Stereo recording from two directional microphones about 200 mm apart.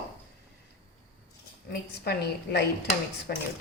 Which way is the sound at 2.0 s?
55° left (ahead or behind).